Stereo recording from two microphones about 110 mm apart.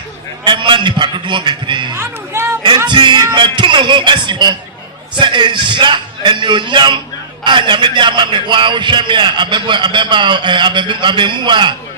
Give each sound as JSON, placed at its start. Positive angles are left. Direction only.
{"t": 0.4, "sound": "a man's voice", "side_deg": -45}
{"t": 2.0, "sound": "speech", "side_deg": -25}
{"t": 2.6, "sound": "a man's voice", "side_deg": -45}